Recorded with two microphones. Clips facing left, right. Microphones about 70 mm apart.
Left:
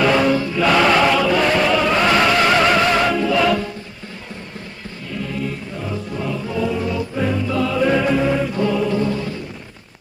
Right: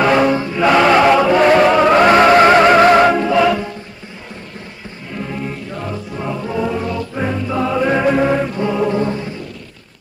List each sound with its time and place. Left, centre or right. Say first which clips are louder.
0.0 s music: right 3 dB; right
5.1 s music: right 1 dB; right
8.5 s mantra: right 2 dB; right